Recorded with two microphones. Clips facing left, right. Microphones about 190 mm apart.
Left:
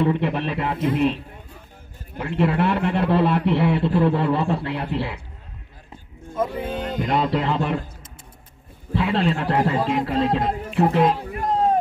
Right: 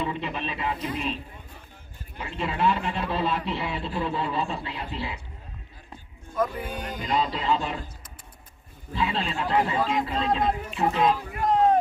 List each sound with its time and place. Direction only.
0.0 s a man's voice: 65° left (ahead or behind)
6.3 s speech: 25° left (ahead or behind)
7.0 s a man's voice: 60° left (ahead or behind)
8.9 s a man's voice: 65° left (ahead or behind)